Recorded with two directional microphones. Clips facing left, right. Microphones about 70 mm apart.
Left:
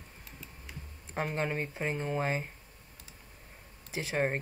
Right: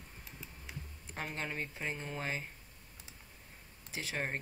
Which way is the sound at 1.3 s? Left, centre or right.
Left.